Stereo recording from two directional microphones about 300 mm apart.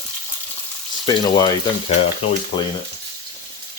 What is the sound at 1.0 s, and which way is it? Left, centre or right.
Speech, centre.